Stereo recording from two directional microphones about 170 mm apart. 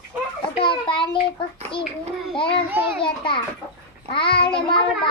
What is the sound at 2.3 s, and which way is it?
Speech, 30° left (ahead or behind).